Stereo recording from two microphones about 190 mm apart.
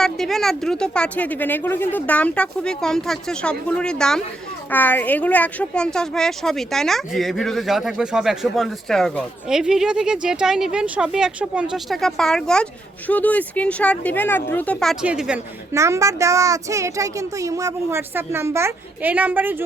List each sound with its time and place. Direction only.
0.0 s speech: centre (ahead or behind)
15.7 s speech: 15° right (ahead or behind)